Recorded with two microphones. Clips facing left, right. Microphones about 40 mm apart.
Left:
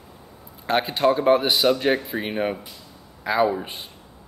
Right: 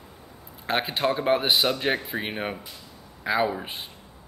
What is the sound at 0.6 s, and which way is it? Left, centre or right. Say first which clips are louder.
Speech: left 5 dB; centre.